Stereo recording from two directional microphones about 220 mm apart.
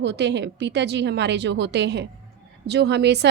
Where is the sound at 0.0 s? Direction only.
50° right (ahead or behind).